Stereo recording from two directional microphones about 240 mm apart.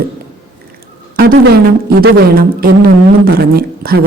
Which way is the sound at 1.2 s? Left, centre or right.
Right.